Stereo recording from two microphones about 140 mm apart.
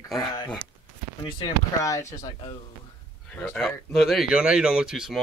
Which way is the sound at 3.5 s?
Centre (ahead or behind).